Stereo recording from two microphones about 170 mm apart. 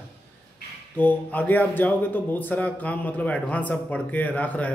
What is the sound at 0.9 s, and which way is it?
A man's voice, 10° left (ahead or behind).